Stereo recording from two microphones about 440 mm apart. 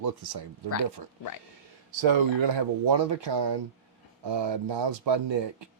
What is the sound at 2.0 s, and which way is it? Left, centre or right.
Speech, right.